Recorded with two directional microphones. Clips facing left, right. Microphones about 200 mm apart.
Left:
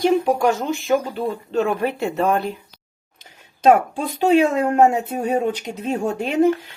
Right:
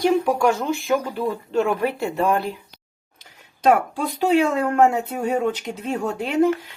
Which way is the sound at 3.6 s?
25° left (ahead or behind).